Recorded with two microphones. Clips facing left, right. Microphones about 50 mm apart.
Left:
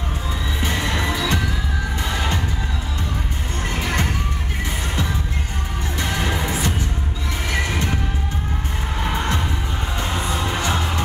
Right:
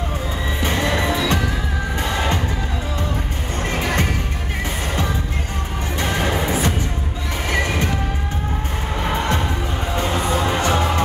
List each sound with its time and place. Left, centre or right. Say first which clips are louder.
0.7 s music: right 3 dB; right
3.8 s music: right 1 dB; right
5.9 s music: right 3 dB; right
9.9 s music: right 5 dB; right